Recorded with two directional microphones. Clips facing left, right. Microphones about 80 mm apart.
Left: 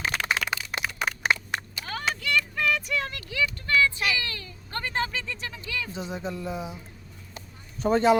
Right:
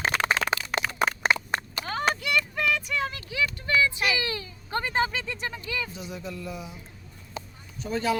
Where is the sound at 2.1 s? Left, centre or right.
Right.